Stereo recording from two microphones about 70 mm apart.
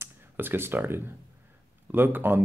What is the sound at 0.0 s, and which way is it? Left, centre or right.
Speech, right.